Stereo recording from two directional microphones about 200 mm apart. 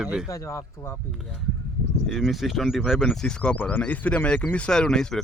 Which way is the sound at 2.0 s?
Centre (ahead or behind).